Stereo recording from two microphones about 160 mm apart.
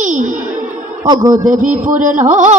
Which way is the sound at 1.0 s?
20° right (ahead or behind).